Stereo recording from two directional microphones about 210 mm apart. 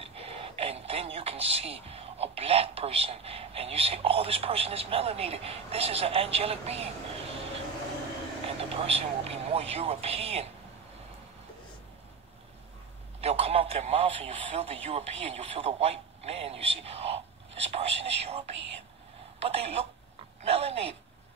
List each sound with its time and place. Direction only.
0.0 s radio: 30° right (ahead or behind)
8.5 s speech: 30° right (ahead or behind)
13.2 s a man's voice: 30° right (ahead or behind)
19.4 s speech: 30° right (ahead or behind)
20.4 s a sound: 30° right (ahead or behind)